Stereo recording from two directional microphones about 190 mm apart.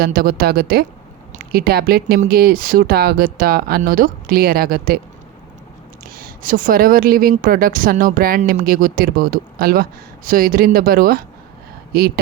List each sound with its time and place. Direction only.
0.0 s a woman's voice: 50° right (ahead or behind)
6.1 s a woman's voice: 50° right (ahead or behind)